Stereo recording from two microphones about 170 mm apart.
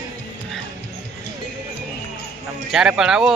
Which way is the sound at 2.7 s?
5° right (ahead or behind).